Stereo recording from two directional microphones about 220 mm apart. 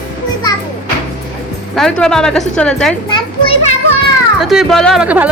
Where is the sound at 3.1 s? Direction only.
25° left (ahead or behind).